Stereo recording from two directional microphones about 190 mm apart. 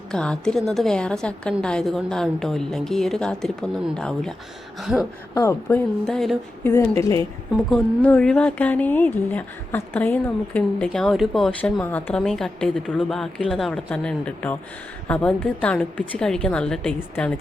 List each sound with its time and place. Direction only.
0.1 s speech: 5° left (ahead or behind)
5.3 s speech: 15° left (ahead or behind)
6.7 s speech: 15° left (ahead or behind)
7.5 s speech: 5° left (ahead or behind)